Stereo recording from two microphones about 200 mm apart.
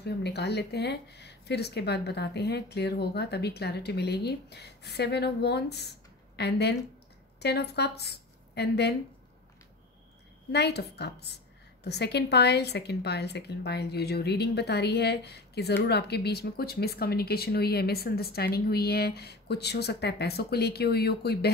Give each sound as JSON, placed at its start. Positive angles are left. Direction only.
{"t": 0.0, "sound": "speech", "side_deg": 55}
{"t": 10.5, "sound": "speech", "side_deg": 55}